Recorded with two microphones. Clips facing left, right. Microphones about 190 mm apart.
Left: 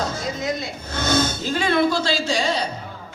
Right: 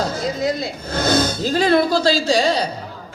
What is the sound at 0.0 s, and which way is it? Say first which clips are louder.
Speech: right 5 dB; 35° right (ahead or behind).